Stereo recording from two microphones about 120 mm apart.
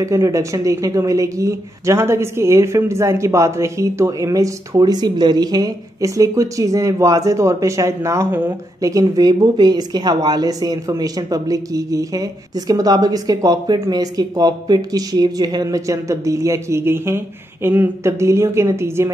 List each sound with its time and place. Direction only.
0.0 s a woman's voice: 25° right (ahead or behind)